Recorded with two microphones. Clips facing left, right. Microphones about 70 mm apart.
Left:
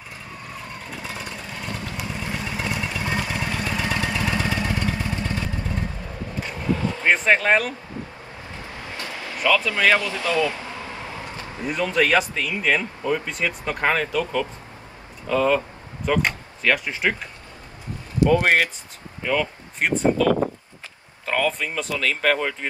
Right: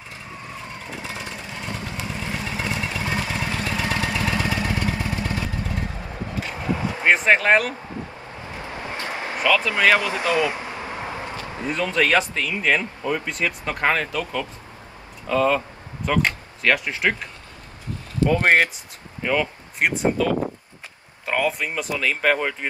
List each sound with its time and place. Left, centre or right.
0.5 s vehicle: centre
2.3 s vehicle: centre
2.6 s vehicle: centre
6.8 s a sound: centre
8.6 s vehicle: right
9.6 s speech: right
9.8 s a sound: right
11.7 s speech: centre
18.4 s speech: right
20.0 s speech: centre